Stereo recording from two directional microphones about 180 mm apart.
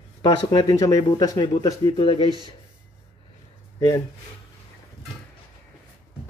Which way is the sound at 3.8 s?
20° left (ahead or behind).